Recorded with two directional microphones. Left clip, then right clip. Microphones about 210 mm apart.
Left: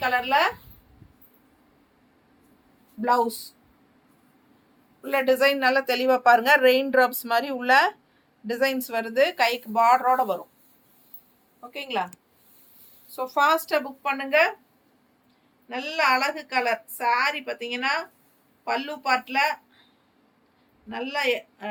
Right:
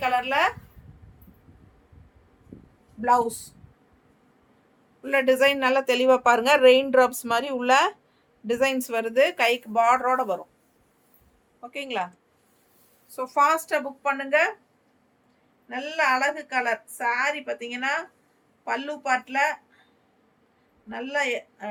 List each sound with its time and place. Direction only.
0.0 s a woman's voice: 15° right (ahead or behind)
3.0 s a woman's voice: 20° right (ahead or behind)
5.0 s speech: 25° right (ahead or behind)
11.7 s speech: 20° right (ahead or behind)
13.1 s a woman's voice: 20° right (ahead or behind)
15.7 s a woman's voice: 10° right (ahead or behind)
20.9 s a woman's voice: 10° right (ahead or behind)